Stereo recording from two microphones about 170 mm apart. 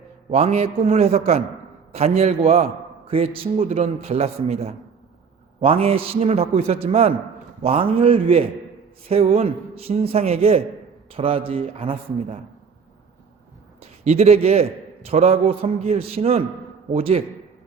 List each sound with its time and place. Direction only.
0.3 s a man's voice: 40° right (ahead or behind)
14.0 s a man's voice: 40° right (ahead or behind)